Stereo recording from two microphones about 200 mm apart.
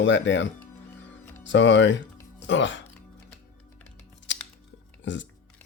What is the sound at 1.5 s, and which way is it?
Speech, 65° left (ahead or behind).